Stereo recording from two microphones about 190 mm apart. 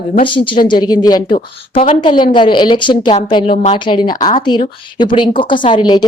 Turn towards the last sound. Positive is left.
turn(degrees=25)  # may be behind; listen again after turning